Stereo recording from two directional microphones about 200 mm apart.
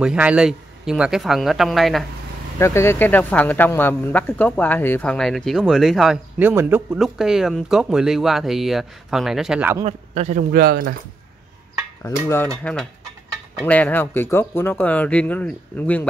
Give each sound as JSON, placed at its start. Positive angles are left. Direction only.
{"t": 0.0, "sound": "speech", "side_deg": -5}
{"t": 2.6, "sound": "speech", "side_deg": 15}
{"t": 9.8, "sound": "speech", "side_deg": -35}
{"t": 12.0, "sound": "speech", "side_deg": 10}